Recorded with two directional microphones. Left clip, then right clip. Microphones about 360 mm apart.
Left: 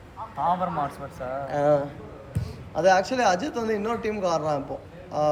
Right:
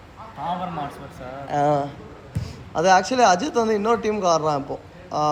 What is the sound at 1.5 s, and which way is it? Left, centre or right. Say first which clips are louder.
A man's voice: right 2 dB; centre.